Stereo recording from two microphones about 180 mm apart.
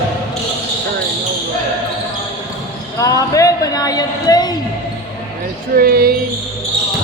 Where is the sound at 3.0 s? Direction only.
20° left (ahead or behind).